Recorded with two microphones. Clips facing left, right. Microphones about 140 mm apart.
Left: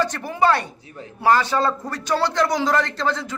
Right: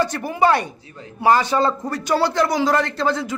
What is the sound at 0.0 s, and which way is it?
A man's voice, 10° right (ahead or behind).